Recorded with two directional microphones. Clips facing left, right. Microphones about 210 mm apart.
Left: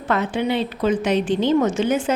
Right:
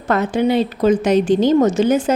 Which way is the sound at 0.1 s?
45° right (ahead or behind).